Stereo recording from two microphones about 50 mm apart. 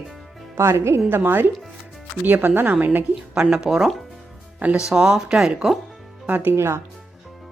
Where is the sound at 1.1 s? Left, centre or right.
Right.